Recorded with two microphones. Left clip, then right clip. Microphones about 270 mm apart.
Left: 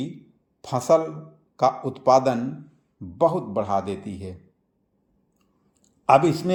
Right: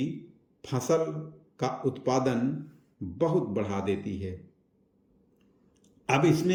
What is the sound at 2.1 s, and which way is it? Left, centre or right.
Speech, left.